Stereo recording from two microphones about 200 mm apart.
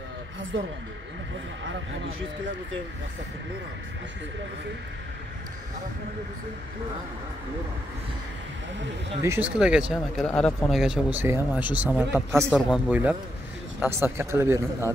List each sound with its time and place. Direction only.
1.6 s speech: 75° right (ahead or behind)
9.2 s speech: 10° right (ahead or behind)
12.4 s speech: centre (ahead or behind)